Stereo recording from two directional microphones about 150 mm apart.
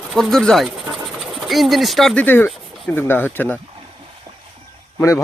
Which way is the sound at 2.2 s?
10° left (ahead or behind).